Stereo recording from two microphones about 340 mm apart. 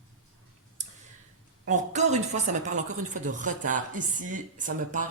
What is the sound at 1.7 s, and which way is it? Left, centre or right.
Speech, right.